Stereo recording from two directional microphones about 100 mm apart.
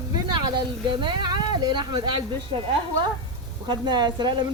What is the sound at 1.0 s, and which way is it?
Speech, 50° right (ahead or behind).